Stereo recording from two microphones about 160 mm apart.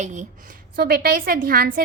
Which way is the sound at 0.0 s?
50° right (ahead or behind).